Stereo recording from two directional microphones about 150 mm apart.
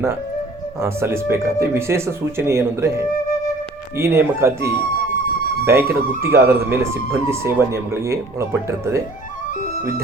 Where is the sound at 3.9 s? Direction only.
15° right (ahead or behind).